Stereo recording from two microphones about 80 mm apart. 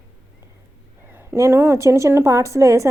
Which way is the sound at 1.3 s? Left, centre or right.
Right.